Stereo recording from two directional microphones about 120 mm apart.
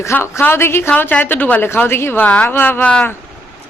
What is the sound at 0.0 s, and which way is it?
A woman's voice, 20° left (ahead or behind).